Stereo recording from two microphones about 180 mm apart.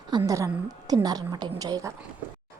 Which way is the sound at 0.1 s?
20° right (ahead or behind).